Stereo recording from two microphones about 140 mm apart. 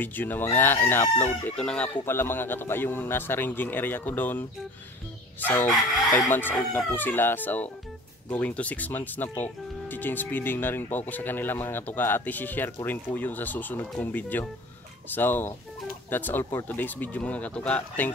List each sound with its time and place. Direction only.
0.0 s speech: 15° left (ahead or behind)